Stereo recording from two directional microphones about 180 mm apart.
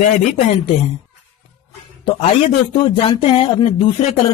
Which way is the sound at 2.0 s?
35° left (ahead or behind).